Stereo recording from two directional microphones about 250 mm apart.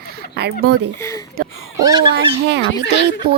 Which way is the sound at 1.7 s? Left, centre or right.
Centre.